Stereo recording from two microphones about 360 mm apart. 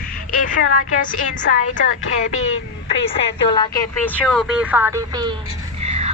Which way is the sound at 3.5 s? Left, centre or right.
Centre.